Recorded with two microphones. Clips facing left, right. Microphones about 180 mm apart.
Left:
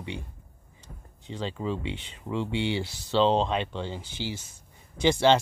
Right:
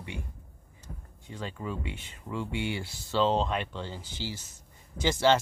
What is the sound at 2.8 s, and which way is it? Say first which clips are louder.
Speech: left 6 dB; 80° left.